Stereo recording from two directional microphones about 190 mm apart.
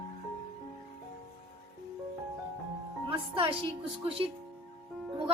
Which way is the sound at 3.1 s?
30° right (ahead or behind).